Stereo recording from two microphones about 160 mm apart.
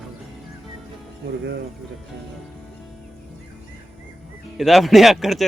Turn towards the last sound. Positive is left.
turn(degrees=0)  # may be behind; listen again after turning